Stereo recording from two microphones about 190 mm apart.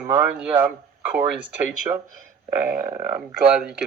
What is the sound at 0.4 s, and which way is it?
Speech, 10° right (ahead or behind).